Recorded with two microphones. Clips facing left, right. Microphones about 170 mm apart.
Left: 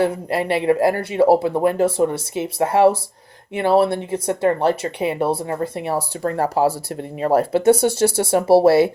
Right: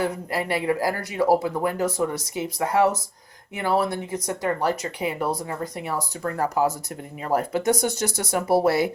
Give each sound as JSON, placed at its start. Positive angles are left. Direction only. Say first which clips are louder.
{"t": 0.0, "sound": "speech", "louder": "left 6 dB", "side_deg": 25}